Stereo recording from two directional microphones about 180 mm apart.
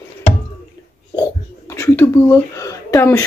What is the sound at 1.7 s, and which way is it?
Speech, 15° left (ahead or behind).